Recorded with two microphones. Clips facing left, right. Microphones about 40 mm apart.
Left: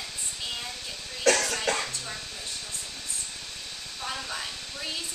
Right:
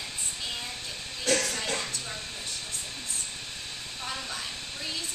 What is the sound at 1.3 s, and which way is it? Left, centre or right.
Music, left.